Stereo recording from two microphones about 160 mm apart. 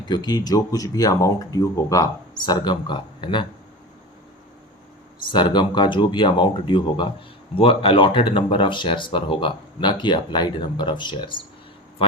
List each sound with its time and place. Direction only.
0.1 s speech: 25° left (ahead or behind)
5.3 s speech: 30° left (ahead or behind)